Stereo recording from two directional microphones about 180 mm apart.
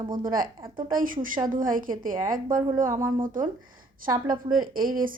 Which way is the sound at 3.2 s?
50° right (ahead or behind).